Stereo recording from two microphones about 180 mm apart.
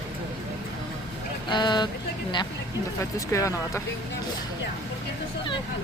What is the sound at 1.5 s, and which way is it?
Speech, 25° left (ahead or behind).